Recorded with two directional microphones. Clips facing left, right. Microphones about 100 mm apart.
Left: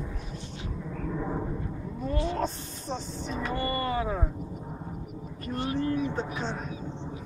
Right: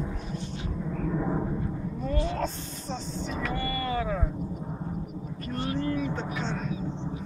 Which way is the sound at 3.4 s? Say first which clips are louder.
Left 2 dB; 25° left (ahead or behind).